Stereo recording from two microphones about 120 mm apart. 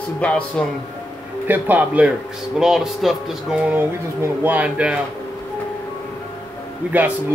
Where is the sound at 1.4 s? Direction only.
15° right (ahead or behind).